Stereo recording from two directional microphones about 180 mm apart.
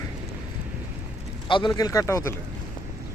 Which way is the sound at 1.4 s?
25° left (ahead or behind).